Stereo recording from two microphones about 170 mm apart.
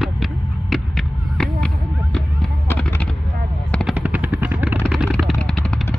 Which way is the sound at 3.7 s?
5° left (ahead or behind).